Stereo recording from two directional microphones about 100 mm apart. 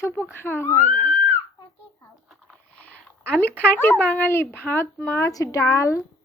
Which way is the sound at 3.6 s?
20° left (ahead or behind).